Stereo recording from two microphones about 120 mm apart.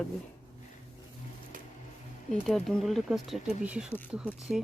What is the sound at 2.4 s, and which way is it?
Speech, 5° left (ahead or behind).